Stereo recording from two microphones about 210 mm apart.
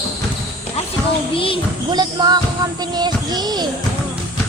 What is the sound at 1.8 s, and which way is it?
Child singing, 20° right (ahead or behind).